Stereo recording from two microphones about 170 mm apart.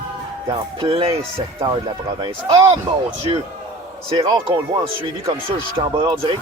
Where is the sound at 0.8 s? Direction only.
35° right (ahead or behind).